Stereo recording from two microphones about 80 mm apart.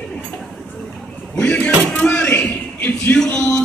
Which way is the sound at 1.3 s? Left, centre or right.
Centre.